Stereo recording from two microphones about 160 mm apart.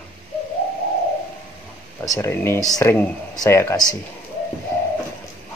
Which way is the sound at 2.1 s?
15° left (ahead or behind).